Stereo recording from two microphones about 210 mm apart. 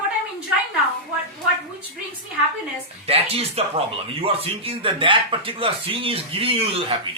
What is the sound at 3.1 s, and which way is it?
Speech, 30° right (ahead or behind).